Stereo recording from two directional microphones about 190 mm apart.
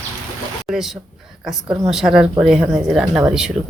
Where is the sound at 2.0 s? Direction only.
20° right (ahead or behind).